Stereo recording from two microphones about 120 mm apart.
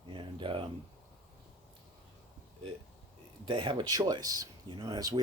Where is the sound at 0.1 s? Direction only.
45° right (ahead or behind).